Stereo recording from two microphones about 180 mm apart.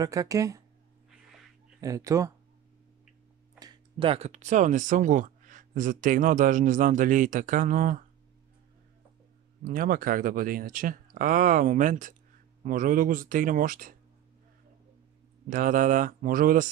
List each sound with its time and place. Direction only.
0.0 s speech: 20° right (ahead or behind)
1.8 s speech: 20° right (ahead or behind)
3.5 s speech: 25° right (ahead or behind); by 8.0 s 50° right (ahead or behind)
9.7 s speech: 50° right (ahead or behind)
15.5 s speech: 50° right (ahead or behind)